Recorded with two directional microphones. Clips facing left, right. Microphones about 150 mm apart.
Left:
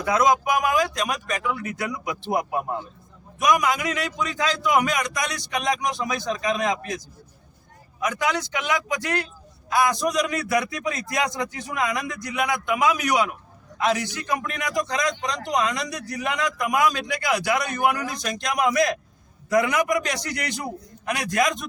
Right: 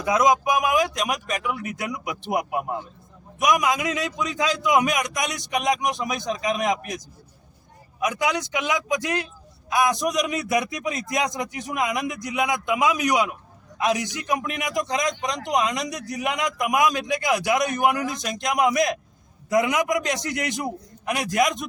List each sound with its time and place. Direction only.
0.0 s a man's voice: 15° right (ahead or behind)